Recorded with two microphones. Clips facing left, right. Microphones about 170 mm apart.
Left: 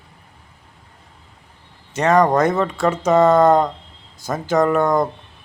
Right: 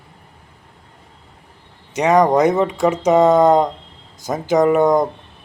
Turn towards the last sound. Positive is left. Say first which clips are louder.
# right 3 dB
turn(degrees=-15)  # may be behind; listen again after turning